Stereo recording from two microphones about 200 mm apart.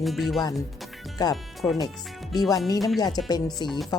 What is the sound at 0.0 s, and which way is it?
Speech, centre (ahead or behind).